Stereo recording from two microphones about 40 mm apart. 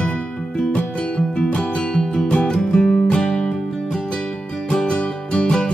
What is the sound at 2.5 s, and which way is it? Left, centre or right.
Music, centre.